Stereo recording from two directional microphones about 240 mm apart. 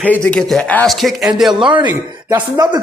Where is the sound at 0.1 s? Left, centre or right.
Centre.